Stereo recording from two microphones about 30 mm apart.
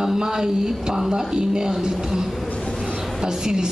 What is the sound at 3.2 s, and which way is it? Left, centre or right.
Speech, right.